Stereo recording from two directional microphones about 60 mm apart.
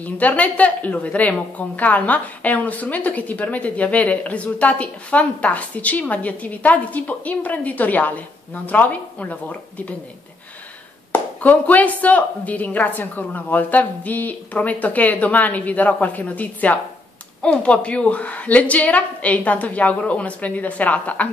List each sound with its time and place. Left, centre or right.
0.0 s a woman's voice: left
11.1 s a woman's voice: left